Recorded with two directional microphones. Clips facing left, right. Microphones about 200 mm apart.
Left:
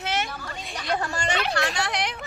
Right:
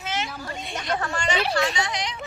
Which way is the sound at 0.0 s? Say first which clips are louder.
Left 2 dB; 65° left (ahead or behind).